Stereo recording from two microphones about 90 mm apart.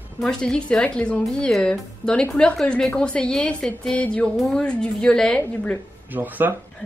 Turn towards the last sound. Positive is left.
turn(degrees=-20)  # may be behind; listen again after turning